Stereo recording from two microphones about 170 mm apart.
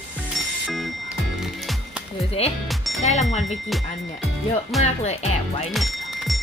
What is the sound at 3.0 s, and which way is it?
Speech, 40° left (ahead or behind).